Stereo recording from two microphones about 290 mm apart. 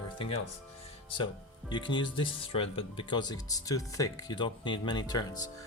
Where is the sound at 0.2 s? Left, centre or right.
Centre.